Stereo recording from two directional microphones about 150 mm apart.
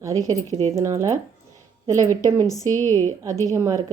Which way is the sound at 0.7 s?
20° right (ahead or behind).